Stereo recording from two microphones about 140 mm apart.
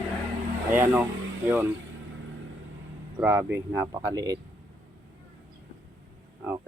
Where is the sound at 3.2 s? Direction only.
15° right (ahead or behind).